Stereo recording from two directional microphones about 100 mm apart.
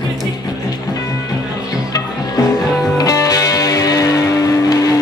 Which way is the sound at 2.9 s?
35° left (ahead or behind).